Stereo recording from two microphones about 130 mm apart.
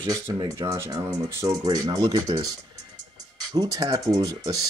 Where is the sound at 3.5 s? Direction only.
25° right (ahead or behind).